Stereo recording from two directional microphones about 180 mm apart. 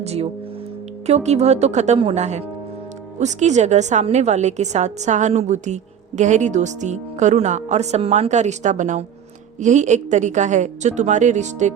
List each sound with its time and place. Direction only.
0.0 s a woman's voice: 35° right (ahead or behind)